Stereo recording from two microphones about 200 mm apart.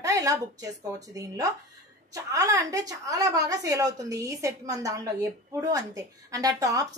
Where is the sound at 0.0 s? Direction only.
15° right (ahead or behind).